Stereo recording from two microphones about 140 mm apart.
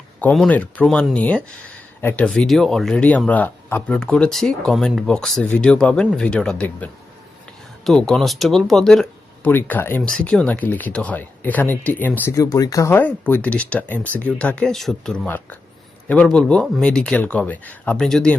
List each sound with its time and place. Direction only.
0.4 s speech: 10° left (ahead or behind)
9.5 s speech: 15° left (ahead or behind)